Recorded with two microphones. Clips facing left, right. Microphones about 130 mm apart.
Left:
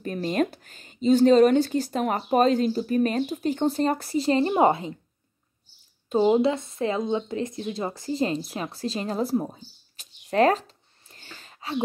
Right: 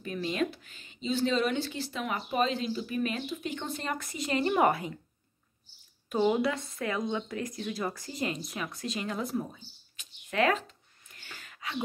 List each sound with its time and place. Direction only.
0.0 s speech: 45° left (ahead or behind); by 4.9 s 25° left (ahead or behind)
6.0 s a woman's voice: 25° left (ahead or behind)
11.1 s gasp: 30° left (ahead or behind)